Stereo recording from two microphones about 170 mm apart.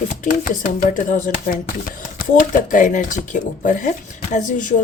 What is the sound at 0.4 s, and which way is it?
Speech, 50° left (ahead or behind).